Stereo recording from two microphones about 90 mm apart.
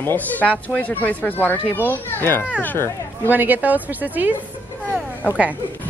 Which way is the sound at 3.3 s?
20° right (ahead or behind).